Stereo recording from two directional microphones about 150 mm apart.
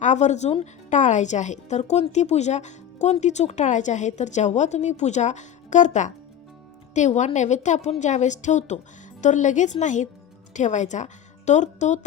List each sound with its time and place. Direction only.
0.0 s a woman's voice: 50° left (ahead or behind)